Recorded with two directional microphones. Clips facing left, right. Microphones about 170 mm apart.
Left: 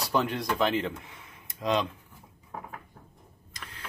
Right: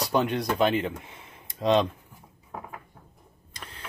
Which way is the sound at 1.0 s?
25° right (ahead or behind).